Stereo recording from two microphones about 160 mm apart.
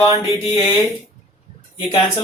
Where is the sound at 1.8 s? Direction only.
35° left (ahead or behind).